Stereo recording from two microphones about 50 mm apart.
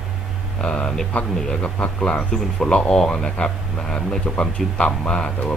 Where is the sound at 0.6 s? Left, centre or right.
Centre.